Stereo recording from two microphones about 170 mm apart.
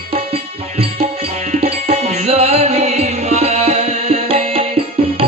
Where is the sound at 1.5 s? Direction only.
35° right (ahead or behind).